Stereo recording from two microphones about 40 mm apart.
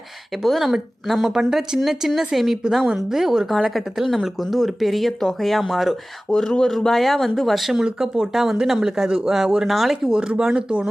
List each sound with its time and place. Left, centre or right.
0.4 s speech: centre
1.3 s speech: centre
6.3 s speech: centre
7.9 s speech: centre
10.2 s speech: right